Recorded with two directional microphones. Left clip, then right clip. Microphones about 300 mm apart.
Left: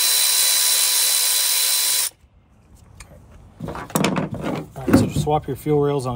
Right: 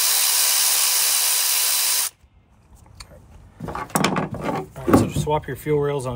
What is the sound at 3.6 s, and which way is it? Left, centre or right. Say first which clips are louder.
Drawer open or close: even; centre.